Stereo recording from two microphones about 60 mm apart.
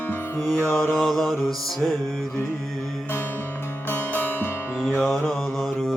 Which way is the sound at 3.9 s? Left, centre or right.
Left.